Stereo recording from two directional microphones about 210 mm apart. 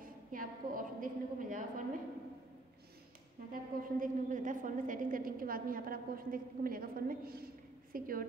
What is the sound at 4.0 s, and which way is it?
A woman's voice, 40° right (ahead or behind).